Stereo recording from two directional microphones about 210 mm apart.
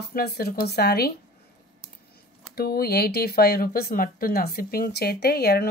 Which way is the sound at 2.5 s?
45° left (ahead or behind).